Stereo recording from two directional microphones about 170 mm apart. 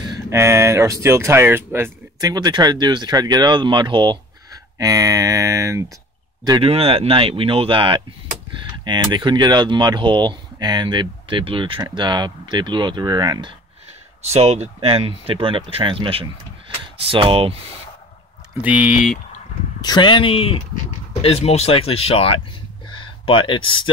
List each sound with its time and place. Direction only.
0.0 s speech: 20° right (ahead or behind)
6.6 s speech: 35° right (ahead or behind)
14.2 s speech: 40° right (ahead or behind)
18.6 s speech: 10° right (ahead or behind)
19.8 s speech: 25° left (ahead or behind)